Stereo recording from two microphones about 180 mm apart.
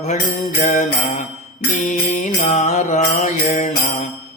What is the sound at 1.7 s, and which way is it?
Mantra, 45° left (ahead or behind).